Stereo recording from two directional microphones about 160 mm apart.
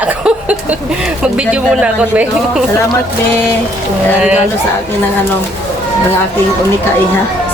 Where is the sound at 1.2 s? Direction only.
5° right (ahead or behind).